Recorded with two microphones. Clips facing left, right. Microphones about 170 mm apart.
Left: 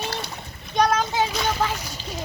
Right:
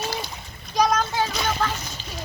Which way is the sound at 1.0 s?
15° left (ahead or behind).